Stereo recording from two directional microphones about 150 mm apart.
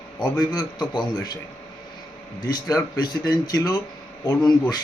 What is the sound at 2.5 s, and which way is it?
A man's voice, 25° left (ahead or behind).